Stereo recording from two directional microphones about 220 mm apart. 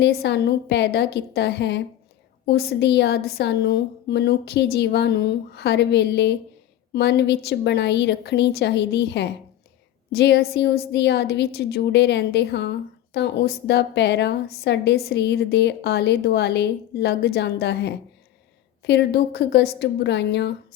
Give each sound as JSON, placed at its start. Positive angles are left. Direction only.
{"t": 0.0, "sound": "a woman's voice", "side_deg": 50}